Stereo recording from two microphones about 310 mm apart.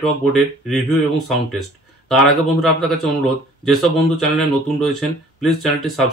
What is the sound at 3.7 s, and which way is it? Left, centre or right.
Speech, centre.